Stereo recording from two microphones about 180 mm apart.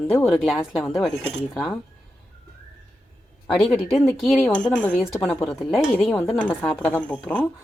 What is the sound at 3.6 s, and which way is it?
A woman's voice, centre (ahead or behind).